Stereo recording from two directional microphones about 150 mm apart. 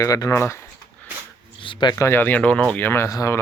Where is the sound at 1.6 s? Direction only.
30° left (ahead or behind).